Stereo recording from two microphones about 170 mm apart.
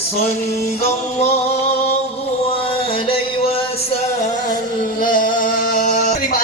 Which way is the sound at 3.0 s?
35° left (ahead or behind).